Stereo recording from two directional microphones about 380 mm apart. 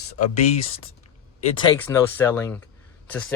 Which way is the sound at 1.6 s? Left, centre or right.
Centre.